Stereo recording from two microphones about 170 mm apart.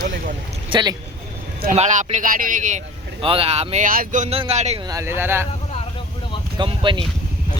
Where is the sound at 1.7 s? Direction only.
45° right (ahead or behind).